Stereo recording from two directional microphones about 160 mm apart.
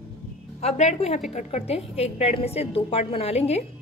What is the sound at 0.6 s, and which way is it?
A woman's voice, 45° left (ahead or behind).